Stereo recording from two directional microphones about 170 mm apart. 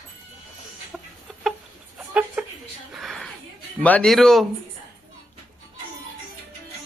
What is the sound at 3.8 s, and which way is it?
Speech, 5° left (ahead or behind).